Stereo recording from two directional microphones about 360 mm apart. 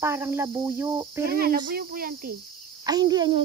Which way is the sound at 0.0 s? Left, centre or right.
Centre.